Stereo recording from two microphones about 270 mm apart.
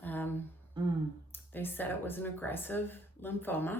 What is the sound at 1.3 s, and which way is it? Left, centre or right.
Speech, centre.